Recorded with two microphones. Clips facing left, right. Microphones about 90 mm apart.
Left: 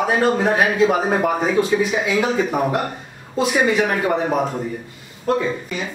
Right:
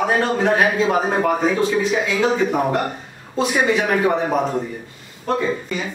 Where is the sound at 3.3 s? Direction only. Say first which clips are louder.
Left 1 dB; centre (ahead or behind).